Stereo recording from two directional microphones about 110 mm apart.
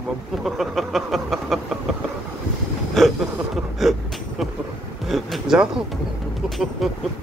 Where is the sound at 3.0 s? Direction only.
Centre (ahead or behind).